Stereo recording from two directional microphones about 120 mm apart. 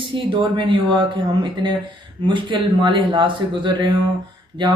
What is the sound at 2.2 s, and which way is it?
Speech, 40° right (ahead or behind).